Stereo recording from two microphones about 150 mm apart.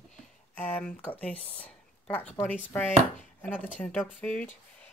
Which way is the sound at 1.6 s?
10° left (ahead or behind).